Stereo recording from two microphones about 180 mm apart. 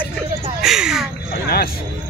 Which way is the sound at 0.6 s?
Centre (ahead or behind).